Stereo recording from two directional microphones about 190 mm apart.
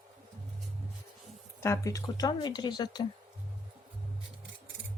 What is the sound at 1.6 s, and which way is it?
Speech, 15° left (ahead or behind).